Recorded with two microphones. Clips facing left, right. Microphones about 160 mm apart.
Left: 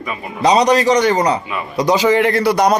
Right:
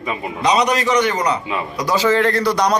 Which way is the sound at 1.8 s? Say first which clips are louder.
Left 4 dB; 20° left (ahead or behind).